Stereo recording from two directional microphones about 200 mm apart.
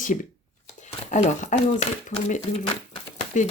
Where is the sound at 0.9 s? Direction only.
35° left (ahead or behind).